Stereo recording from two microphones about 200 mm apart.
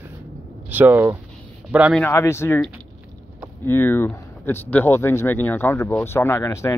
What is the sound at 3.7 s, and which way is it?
Speech, 10° left (ahead or behind).